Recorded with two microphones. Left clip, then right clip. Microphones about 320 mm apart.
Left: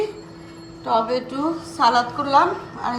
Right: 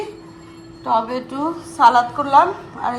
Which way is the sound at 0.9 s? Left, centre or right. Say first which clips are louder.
Right 1 dB; centre.